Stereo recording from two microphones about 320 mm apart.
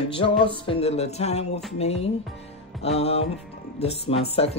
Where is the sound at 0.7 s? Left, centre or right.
Centre.